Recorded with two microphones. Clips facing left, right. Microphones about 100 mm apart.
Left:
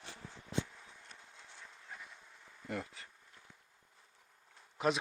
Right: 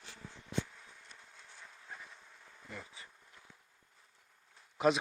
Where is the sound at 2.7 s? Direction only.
65° left (ahead or behind).